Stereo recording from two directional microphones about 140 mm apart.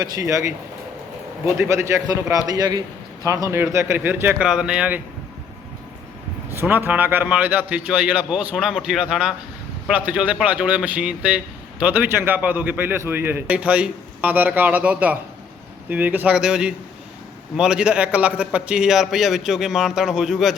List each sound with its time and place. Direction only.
0.0 s a man's voice: 25° right (ahead or behind)
1.5 s a man's voice: 20° right (ahead or behind)
6.5 s a man's voice: 15° right (ahead or behind)